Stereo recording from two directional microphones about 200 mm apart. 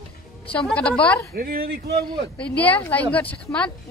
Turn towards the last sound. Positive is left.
turn(degrees=10)  # may be behind; listen again after turning